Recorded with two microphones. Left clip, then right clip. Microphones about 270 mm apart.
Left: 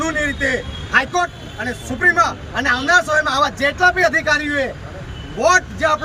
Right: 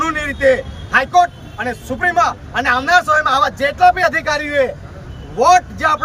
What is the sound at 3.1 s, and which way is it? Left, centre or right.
A man's voice, centre.